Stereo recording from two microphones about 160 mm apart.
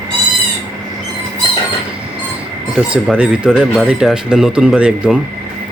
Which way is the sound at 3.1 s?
5° right (ahead or behind).